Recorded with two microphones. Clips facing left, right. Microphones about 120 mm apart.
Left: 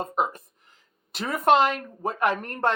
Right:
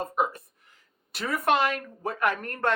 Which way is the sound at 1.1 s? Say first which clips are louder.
Left 4 dB; 25° left (ahead or behind).